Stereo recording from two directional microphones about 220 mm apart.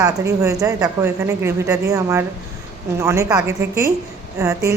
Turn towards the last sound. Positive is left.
turn(degrees=-15)  # may be behind; listen again after turning